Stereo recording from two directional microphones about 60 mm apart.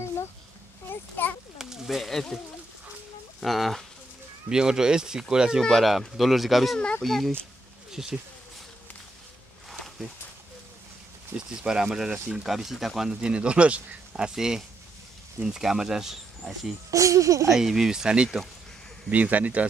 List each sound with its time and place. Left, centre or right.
0.8 s a sound: left
1.6 s a sound: centre
3.3 s speech: centre
4.5 s speech: centre
5.6 s speech: centre
7.9 s speech: centre
11.3 s speech: centre
16.9 s speech: right
17.5 s speech: centre
19.0 s speech: right